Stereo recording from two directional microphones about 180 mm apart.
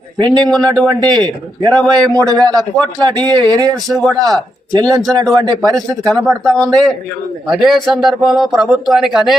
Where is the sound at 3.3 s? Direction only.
25° right (ahead or behind).